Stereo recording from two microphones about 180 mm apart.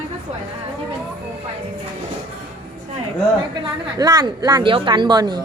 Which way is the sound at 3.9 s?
20° right (ahead or behind).